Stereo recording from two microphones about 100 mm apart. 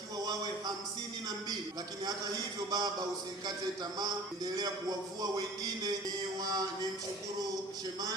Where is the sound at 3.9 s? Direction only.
40° right (ahead or behind).